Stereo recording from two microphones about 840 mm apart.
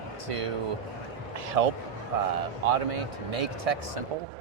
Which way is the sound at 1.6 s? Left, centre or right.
Right.